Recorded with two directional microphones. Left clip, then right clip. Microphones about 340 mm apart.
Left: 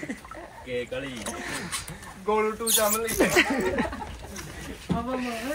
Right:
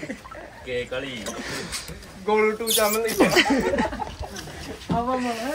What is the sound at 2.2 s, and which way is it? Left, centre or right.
Speech, right.